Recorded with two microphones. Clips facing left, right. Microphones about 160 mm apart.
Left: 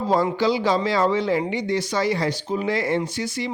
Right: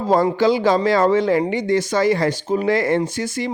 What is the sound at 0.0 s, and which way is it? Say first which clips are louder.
Speech: right 4 dB; 45° right (ahead or behind).